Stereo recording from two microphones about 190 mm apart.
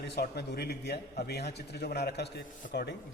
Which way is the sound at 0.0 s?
60° left (ahead or behind).